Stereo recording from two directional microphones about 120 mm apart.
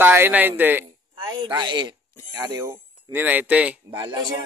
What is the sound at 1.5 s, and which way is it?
Speech, 40° right (ahead or behind).